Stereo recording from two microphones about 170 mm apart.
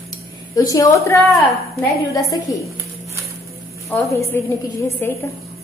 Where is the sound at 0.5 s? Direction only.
20° left (ahead or behind).